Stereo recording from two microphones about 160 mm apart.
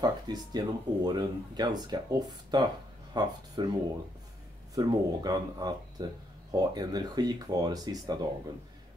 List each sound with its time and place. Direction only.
0.0 s speech: 25° right (ahead or behind)
4.7 s speech: 25° right (ahead or behind)